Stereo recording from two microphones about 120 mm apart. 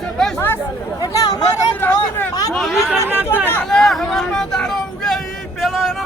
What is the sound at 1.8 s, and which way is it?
Vehicle, 15° left (ahead or behind).